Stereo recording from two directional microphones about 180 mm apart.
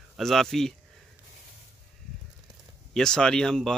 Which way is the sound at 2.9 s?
5° left (ahead or behind).